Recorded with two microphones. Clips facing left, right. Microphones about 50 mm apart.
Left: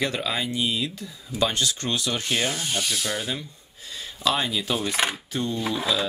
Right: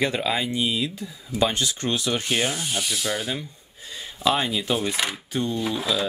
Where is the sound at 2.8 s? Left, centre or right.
Centre.